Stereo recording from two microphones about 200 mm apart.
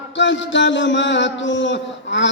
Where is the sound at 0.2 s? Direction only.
65° left (ahead or behind).